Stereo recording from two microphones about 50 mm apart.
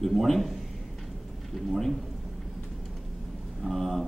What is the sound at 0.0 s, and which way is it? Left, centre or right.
A man's voice, centre.